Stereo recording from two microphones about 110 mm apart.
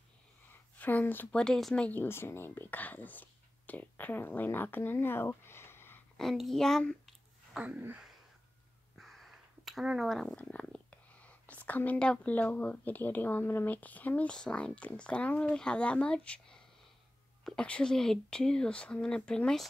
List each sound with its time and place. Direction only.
0.7 s speech: 15° left (ahead or behind)
1.9 s speech: 20° left (ahead or behind)
6.1 s speech: centre (ahead or behind)
7.5 s a sound: 10° right (ahead or behind)
8.9 s speech: centre (ahead or behind)